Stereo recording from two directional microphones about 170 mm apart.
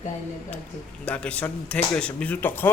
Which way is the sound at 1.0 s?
5° left (ahead or behind).